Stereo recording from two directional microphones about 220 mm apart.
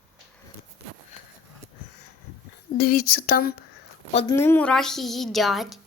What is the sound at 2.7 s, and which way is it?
Speech, 45° left (ahead or behind).